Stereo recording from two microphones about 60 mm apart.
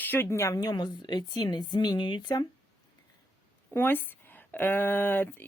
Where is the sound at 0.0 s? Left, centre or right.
Left.